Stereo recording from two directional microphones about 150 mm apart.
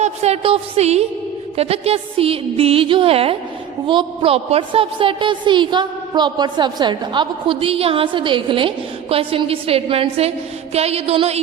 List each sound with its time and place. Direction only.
0.0 s a woman's voice: 45° right (ahead or behind)